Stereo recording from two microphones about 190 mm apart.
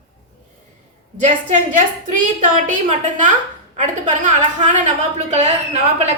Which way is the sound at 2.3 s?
40° right (ahead or behind).